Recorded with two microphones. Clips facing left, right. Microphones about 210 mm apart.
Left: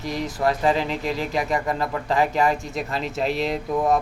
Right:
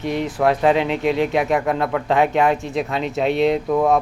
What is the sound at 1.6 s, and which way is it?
Speech, 65° right (ahead or behind).